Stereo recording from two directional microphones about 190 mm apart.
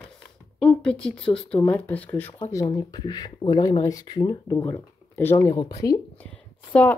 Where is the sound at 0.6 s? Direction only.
5° left (ahead or behind); by 5.9 s 20° left (ahead or behind).